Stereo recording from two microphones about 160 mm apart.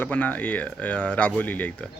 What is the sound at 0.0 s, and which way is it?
Speech, 10° left (ahead or behind).